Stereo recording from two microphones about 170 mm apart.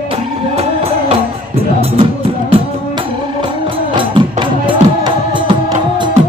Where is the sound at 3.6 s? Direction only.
30° right (ahead or behind).